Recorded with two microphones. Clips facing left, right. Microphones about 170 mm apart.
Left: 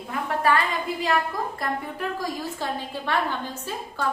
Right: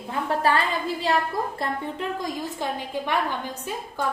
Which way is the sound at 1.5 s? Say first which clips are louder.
Right 1 dB; 20° right (ahead or behind).